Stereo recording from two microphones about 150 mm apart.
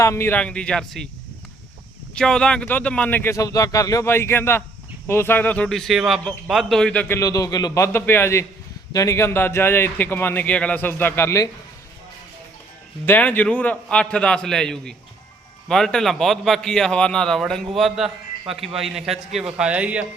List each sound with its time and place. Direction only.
0.0 s a man's voice: 20° left (ahead or behind)
2.1 s a man's voice: 5° left (ahead or behind)
7.2 s a man's voice: 25° left (ahead or behind)
13.1 s a man's voice: 10° left (ahead or behind); by 20.1 s 10° right (ahead or behind)